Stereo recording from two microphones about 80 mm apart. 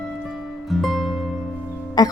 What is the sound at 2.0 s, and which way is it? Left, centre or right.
Music, left.